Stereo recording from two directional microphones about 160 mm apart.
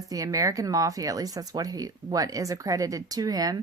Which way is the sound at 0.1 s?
20° right (ahead or behind).